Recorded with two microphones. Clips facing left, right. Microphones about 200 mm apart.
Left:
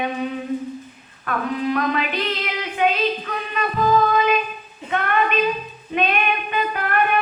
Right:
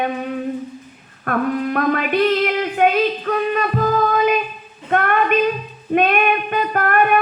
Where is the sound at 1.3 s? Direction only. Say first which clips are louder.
Right 3 dB; 50° right (ahead or behind).